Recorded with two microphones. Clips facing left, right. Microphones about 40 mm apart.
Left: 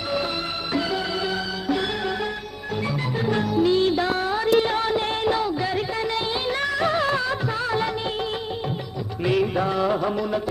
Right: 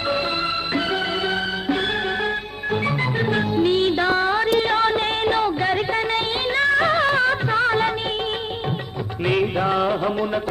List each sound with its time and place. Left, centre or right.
0.7 s music: right
2.8 s music: right
9.2 s music: right